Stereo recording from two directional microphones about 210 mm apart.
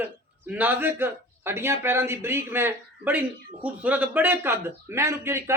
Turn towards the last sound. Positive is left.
turn(degrees=-10)  # may be behind; listen again after turning